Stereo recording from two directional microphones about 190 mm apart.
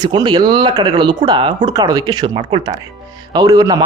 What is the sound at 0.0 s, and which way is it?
A man's voice, 25° right (ahead or behind).